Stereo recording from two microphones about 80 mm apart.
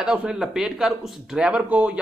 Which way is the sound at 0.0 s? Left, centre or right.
Centre.